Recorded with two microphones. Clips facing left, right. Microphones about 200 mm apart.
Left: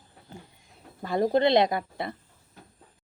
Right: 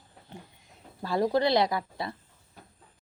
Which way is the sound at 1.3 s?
20° left (ahead or behind).